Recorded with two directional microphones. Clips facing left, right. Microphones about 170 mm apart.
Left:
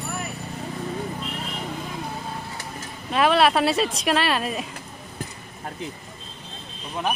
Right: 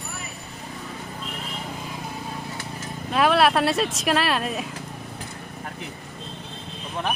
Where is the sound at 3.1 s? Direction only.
Centre (ahead or behind).